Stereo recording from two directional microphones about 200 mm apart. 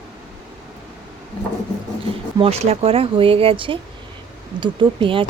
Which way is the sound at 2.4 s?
30° right (ahead or behind).